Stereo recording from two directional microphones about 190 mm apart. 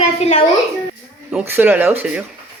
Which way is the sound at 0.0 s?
35° left (ahead or behind).